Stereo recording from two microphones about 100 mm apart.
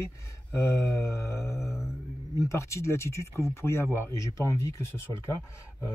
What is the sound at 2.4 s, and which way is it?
Speech, 30° left (ahead or behind).